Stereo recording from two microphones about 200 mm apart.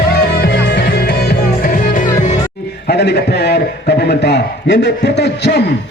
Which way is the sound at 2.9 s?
55° left (ahead or behind).